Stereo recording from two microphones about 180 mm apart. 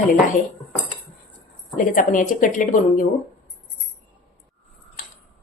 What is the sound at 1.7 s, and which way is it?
Speech, 50° left (ahead or behind).